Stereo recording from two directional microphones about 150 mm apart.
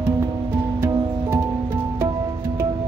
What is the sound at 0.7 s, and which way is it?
Music, 15° right (ahead or behind).